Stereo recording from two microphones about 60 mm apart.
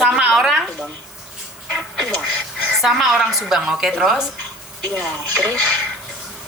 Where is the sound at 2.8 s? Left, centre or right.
Centre.